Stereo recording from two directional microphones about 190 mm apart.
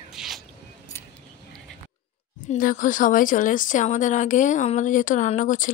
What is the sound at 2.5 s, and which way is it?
A woman's voice, 45° left (ahead or behind).